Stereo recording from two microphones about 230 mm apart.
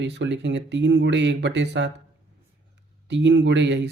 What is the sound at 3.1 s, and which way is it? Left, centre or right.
Speech, right.